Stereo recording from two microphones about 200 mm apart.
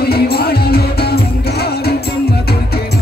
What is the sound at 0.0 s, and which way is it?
Music, 50° left (ahead or behind).